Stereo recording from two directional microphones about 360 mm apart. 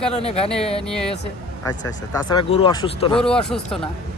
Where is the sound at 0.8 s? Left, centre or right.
Centre.